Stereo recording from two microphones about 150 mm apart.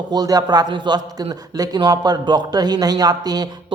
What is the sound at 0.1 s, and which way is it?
A man's voice, 25° right (ahead or behind).